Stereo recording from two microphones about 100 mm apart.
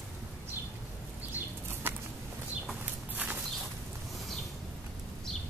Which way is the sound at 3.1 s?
15° right (ahead or behind).